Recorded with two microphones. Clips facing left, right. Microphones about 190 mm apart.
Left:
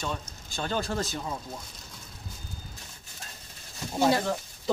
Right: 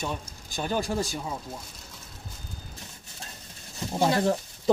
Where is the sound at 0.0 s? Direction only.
15° right (ahead or behind).